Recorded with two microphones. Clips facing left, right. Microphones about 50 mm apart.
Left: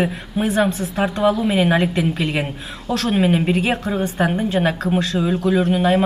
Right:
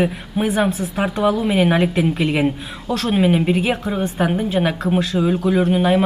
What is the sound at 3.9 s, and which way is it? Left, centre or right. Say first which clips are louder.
Speech: even; centre.